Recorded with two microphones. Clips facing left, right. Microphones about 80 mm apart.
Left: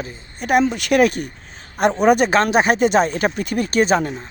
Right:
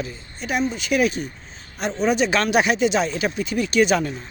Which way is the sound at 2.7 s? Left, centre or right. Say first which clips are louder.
Left 4 dB; left.